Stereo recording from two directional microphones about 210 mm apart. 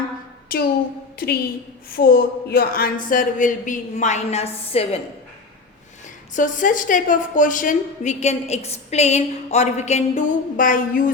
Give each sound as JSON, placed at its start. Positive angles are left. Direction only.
{"t": 1.2, "sound": "a woman's voice", "side_deg": 45}
{"t": 6.3, "sound": "a woman's voice", "side_deg": 40}